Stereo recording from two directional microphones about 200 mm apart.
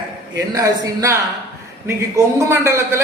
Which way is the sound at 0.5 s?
15° right (ahead or behind).